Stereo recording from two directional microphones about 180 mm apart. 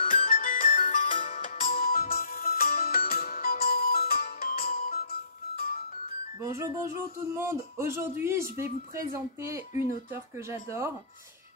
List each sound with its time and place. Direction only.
0.0 s music: 50° left (ahead or behind)
6.4 s speech: 15° right (ahead or behind)